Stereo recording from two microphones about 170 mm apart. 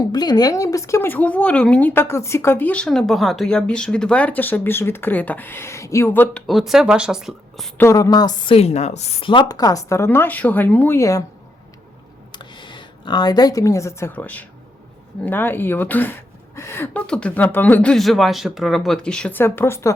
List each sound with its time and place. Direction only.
0.1 s speech: 25° left (ahead or behind)
6.3 s speech: centre (ahead or behind)
7.8 s speech: 15° left (ahead or behind)
8.5 s speech: 40° left (ahead or behind); by 11.2 s 15° left (ahead or behind)
12.3 s speech: 25° left (ahead or behind)